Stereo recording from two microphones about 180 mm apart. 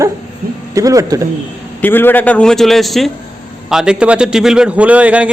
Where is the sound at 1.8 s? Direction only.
10° left (ahead or behind); by 5.2 s 5° right (ahead or behind).